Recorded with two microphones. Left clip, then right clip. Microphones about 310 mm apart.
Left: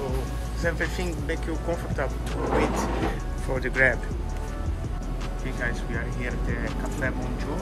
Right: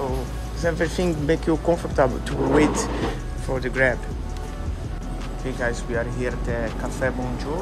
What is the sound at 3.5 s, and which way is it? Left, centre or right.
Speech, centre.